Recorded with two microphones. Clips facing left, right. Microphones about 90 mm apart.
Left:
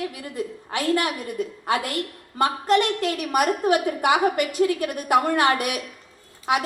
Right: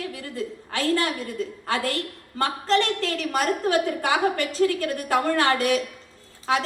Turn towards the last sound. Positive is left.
turn(degrees=15)  # may be behind; listen again after turning